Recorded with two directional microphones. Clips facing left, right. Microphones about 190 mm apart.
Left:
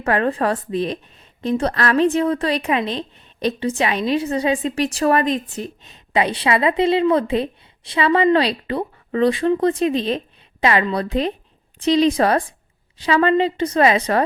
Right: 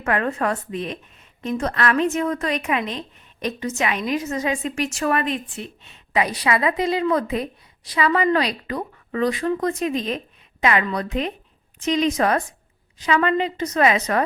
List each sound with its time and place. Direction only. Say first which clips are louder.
0.0 s a woman's voice: left 3 dB; 30° left (ahead or behind)